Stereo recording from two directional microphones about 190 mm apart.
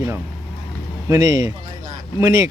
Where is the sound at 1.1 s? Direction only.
20° right (ahead or behind).